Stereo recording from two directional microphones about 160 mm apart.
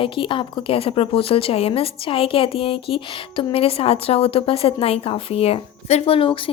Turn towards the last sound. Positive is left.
turn(degrees=35)  # may be behind; listen again after turning